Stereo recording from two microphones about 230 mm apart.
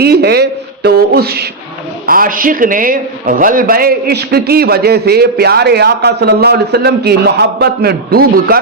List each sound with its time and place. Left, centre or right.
0.0 s a man's voice: right